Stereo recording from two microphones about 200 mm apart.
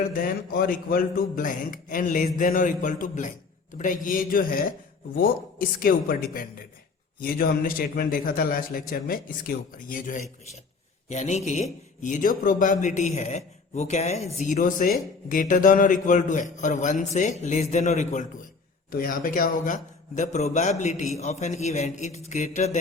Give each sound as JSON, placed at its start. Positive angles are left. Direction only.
{"t": 0.1, "sound": "a man's voice", "side_deg": 45}
{"t": 18.9, "sound": "a man's voice", "side_deg": 45}